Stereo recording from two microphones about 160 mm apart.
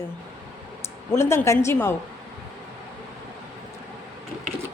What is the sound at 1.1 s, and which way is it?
Speech, 15° left (ahead or behind).